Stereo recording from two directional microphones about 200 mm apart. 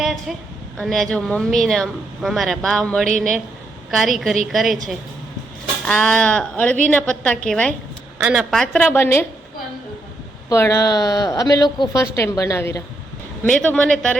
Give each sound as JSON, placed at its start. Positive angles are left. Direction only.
{"t": 0.0, "sound": "a sound", "side_deg": 0}
{"t": 0.8, "sound": "a woman's voice", "side_deg": 0}
{"t": 10.5, "sound": "a woman's voice", "side_deg": 15}